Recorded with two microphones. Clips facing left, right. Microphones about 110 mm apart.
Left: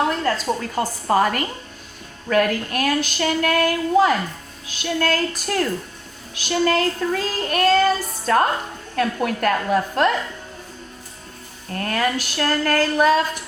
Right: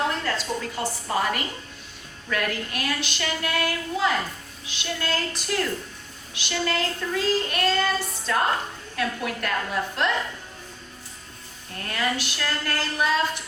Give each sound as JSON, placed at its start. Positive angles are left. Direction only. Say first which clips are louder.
{"t": 0.3, "sound": "a woman's voice", "louder": "left 6 dB", "side_deg": 45}
{"t": 11.7, "sound": "a woman's voice", "louder": "left 6 dB", "side_deg": 45}